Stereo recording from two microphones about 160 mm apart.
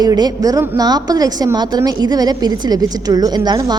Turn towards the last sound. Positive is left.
turn(degrees=-25)  # may be behind; listen again after turning